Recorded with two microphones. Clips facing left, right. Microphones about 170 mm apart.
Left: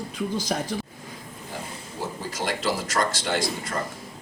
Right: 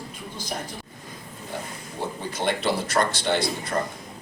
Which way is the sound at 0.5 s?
90° left.